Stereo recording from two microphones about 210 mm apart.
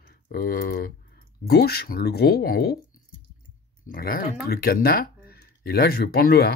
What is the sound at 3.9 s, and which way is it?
Speech, 45° left (ahead or behind).